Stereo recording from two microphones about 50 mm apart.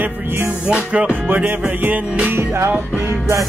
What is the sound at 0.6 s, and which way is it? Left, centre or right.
Music, right.